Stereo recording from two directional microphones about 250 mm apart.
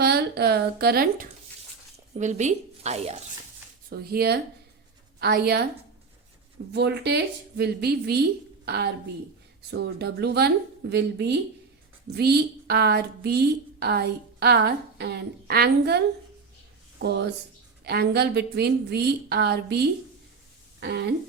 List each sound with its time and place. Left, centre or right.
0.0 s a woman's voice: right
3.8 s a woman's voice: right
6.7 s a woman's voice: right
20.8 s a woman's voice: right